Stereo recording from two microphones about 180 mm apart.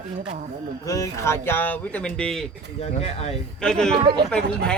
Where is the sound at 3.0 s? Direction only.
35° left (ahead or behind).